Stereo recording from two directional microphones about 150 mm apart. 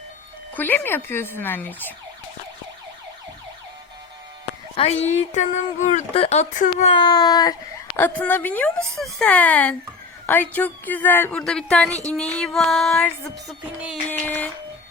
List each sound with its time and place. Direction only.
0.5 s a woman's voice: 10° left (ahead or behind)
4.8 s speech: 45° left (ahead or behind)
6.9 s speech: 30° left (ahead or behind)
7.9 s a woman's voice: 10° left (ahead or behind)
12.1 s music: 5° left (ahead or behind)
14.1 s a woman's voice: 10° left (ahead or behind)